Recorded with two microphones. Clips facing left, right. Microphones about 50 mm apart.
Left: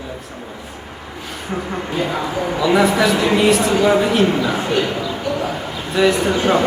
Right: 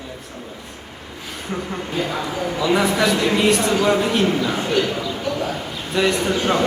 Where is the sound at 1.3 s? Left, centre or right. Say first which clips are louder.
Left 2 dB; centre.